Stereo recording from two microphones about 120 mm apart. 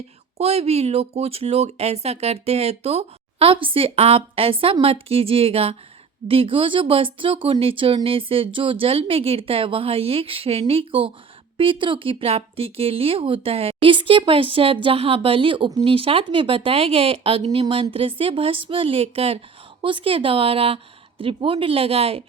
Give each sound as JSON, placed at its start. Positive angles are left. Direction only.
{"t": 0.3, "sound": "speech", "side_deg": -60}